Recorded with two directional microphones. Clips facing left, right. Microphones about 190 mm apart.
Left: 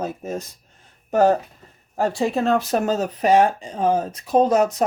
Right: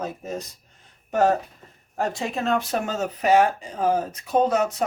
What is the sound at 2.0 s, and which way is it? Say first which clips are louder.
Speech: left 6 dB; 35° left (ahead or behind).